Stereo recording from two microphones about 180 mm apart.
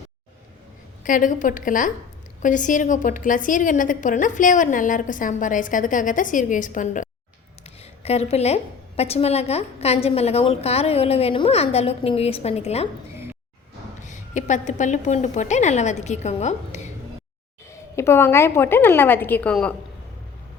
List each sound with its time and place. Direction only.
1.0 s a woman's voice: 45° left (ahead or behind)
14.1 s a woman's voice: 45° left (ahead or behind)
17.9 s a woman's voice: 15° left (ahead or behind)